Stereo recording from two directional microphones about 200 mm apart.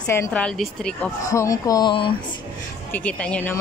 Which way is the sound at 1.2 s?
15° left (ahead or behind).